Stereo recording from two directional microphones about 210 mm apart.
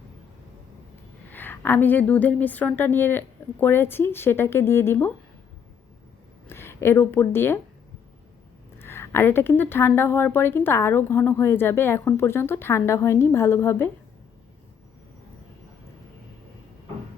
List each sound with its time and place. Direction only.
1.3 s a woman's voice: 10° left (ahead or behind)
6.5 s a woman's voice: 10° left (ahead or behind)
8.8 s a woman's voice: 10° left (ahead or behind)